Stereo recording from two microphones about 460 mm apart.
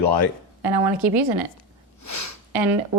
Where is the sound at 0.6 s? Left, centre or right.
Right.